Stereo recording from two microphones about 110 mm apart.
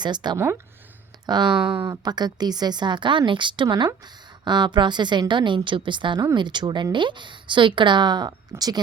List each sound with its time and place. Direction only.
0.0 s speech: 40° right (ahead or behind)